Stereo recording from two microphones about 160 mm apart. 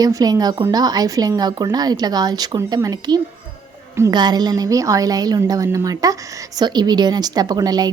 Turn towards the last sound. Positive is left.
turn(degrees=-25)  # may be behind; listen again after turning